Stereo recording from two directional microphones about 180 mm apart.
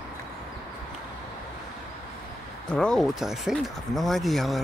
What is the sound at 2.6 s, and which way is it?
Speech, 5° left (ahead or behind).